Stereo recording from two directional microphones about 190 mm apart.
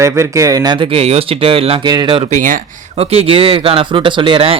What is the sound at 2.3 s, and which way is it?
Speech, 45° right (ahead or behind).